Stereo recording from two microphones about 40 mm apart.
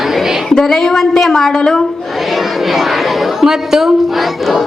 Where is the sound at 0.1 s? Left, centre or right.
Centre.